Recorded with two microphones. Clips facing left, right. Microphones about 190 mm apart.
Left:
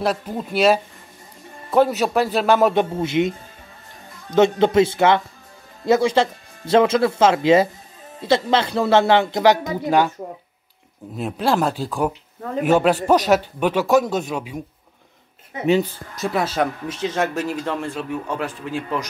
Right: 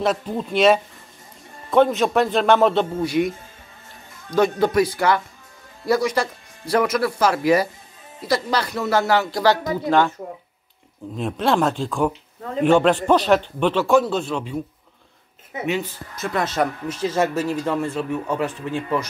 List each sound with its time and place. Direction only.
0.0 s a man's voice: 5° left (ahead or behind)
11.1 s a man's voice: 5° left (ahead or behind)
15.6 s speech: 30° left (ahead or behind)
17.0 s a man's voice: 5° right (ahead or behind)